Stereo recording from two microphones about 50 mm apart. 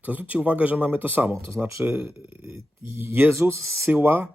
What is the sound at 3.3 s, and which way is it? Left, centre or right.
Speech, right.